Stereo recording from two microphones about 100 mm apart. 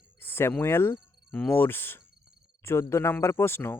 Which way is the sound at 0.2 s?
20° left (ahead or behind).